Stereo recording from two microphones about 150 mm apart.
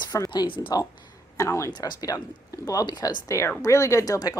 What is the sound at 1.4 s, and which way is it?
A woman's voice, 20° left (ahead or behind).